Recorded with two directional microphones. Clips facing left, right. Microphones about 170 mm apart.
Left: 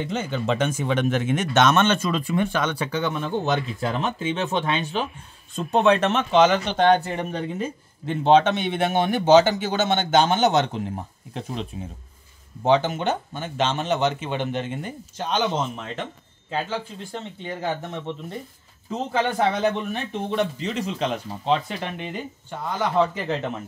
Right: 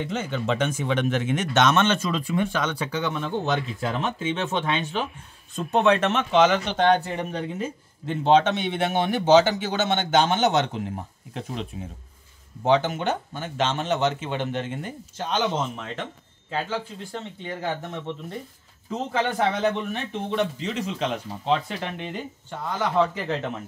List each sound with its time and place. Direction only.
0.0 s speech: 30° left (ahead or behind)
7.6 s speech: 60° left (ahead or behind); by 11.5 s 30° left (ahead or behind)
12.6 s speech: 30° left (ahead or behind)
19.9 s speech: 40° left (ahead or behind)
21.5 s speech: 20° left (ahead or behind)